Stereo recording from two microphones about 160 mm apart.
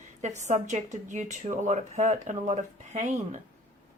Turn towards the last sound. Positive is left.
turn(degrees=-50)  # may be behind; listen again after turning